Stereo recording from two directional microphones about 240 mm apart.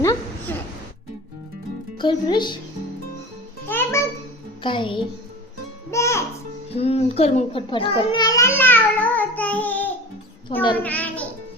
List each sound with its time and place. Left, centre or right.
0.0 s a sound: centre
2.0 s speech: centre
3.7 s music: centre
4.6 s a child's voice: left
6.7 s a sound: left; by 9.9 s centre
10.5 s speech: left
10.8 s a child's voice: centre